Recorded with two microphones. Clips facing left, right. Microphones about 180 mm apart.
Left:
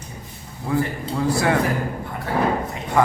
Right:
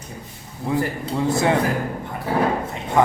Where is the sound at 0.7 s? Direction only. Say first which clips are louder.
Even; 20° right (ahead or behind).